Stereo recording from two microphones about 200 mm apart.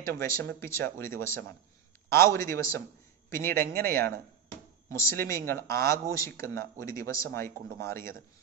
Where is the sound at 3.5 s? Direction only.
45° right (ahead or behind).